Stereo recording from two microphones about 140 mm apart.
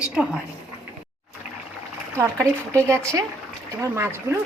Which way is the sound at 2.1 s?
20° right (ahead or behind).